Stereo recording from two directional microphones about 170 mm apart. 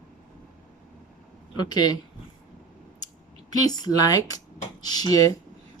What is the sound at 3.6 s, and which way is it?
Speech, 25° left (ahead or behind).